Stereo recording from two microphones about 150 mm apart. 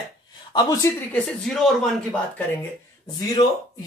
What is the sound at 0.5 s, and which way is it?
Speech, 25° left (ahead or behind).